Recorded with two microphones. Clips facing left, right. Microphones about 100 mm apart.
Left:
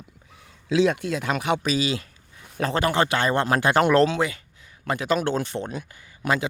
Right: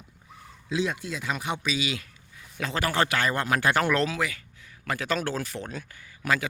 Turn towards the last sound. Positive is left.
turn(degrees=25)  # may be behind; listen again after turning